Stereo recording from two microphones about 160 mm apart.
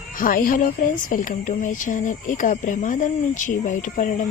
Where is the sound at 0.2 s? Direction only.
60° left (ahead or behind).